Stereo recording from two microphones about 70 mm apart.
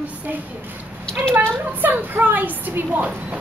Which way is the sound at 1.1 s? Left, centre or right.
Centre.